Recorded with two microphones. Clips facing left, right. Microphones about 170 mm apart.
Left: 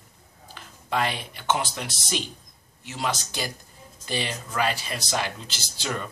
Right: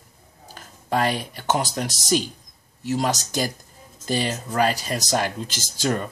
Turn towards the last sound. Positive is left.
turn(degrees=-45)  # may be behind; listen again after turning